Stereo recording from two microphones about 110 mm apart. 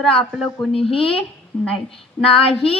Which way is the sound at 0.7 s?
60° left (ahead or behind).